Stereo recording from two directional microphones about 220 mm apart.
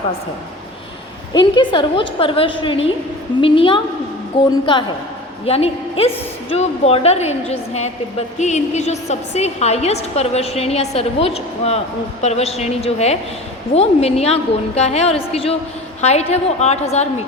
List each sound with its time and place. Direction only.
1.3 s a woman's voice: 20° left (ahead or behind)